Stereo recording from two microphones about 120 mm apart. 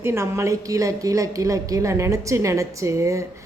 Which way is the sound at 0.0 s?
20° right (ahead or behind).